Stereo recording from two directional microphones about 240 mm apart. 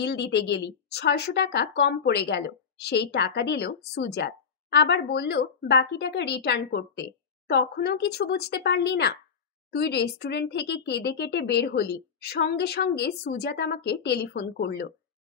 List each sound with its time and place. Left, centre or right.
0.0 s speech: left